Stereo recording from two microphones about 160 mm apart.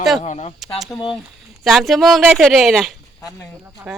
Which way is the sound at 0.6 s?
Centre (ahead or behind).